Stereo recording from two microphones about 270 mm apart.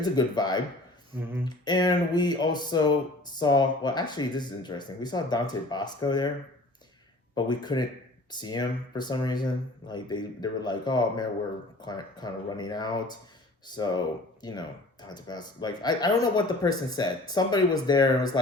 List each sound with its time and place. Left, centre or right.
0.0 s speech: centre
1.2 s a sound: centre
1.5 s speech: centre
7.3 s speech: centre